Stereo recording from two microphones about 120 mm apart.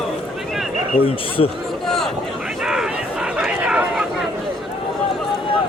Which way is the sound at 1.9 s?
Centre (ahead or behind).